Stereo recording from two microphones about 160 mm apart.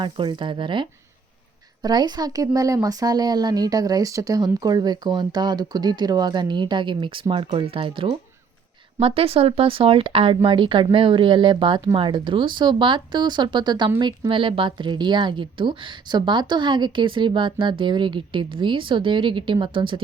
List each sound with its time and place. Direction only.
0.0 s a woman's voice: 30° right (ahead or behind)